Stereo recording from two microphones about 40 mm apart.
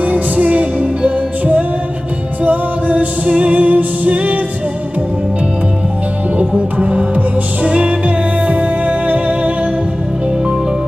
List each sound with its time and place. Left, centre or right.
0.0 s music: right
6.3 s music: right